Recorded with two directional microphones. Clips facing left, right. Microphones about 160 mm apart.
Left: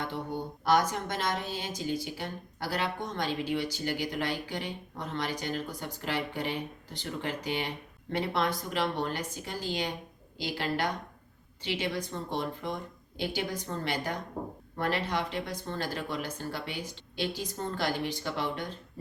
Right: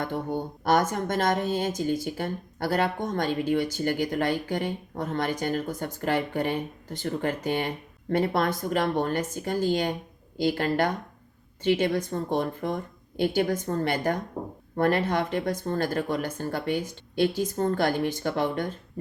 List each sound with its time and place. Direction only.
0.0 s a woman's voice: 50° right (ahead or behind)